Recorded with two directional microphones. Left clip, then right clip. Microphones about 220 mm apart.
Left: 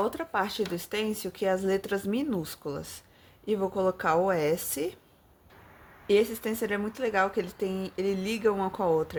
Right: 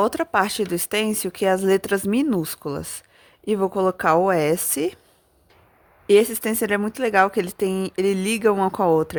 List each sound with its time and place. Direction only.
0.0 s speech: 45° right (ahead or behind)
6.1 s speech: 50° right (ahead or behind)